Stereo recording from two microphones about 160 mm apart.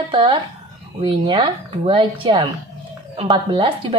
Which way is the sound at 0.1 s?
30° right (ahead or behind).